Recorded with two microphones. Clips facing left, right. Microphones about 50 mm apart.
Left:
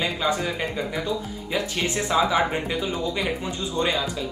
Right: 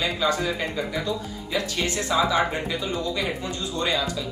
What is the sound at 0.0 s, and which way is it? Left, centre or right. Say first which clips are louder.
Speech: even; left.